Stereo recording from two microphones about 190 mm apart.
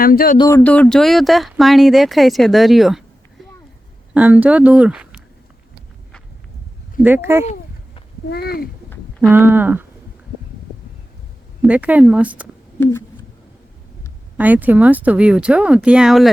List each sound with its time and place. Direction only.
0.0 s speech: 50° left (ahead or behind)
0.3 s speech: 15° left (ahead or behind); by 3.0 s centre (ahead or behind)
4.1 s speech: 10° right (ahead or behind)
7.0 s speech: 10° right (ahead or behind)
8.3 s speech: 55° left (ahead or behind)
9.3 s speech: 10° right (ahead or behind)
11.6 s speech: 5° right (ahead or behind)
14.3 s speech: 10° right (ahead or behind)